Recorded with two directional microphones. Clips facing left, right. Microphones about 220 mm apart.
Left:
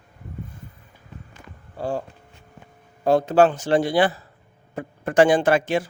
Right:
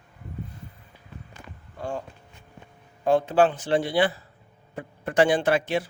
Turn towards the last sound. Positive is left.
turn(degrees=45)  # may be behind; listen again after turning